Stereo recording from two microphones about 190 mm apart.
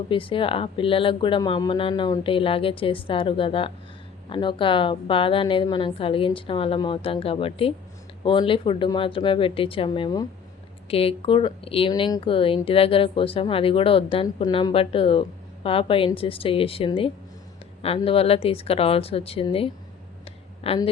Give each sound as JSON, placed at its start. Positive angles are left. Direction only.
{"t": 0.1, "sound": "speech", "side_deg": 25}